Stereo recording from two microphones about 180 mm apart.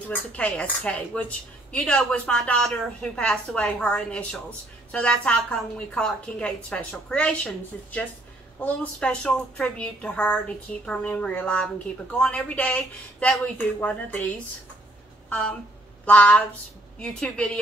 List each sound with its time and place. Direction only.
0.1 s a woman's voice: 5° left (ahead or behind)